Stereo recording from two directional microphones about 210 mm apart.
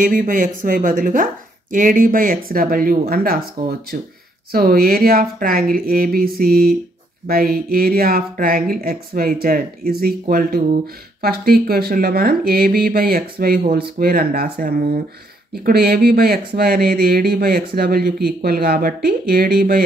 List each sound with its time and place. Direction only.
0.0 s speech: 40° right (ahead or behind)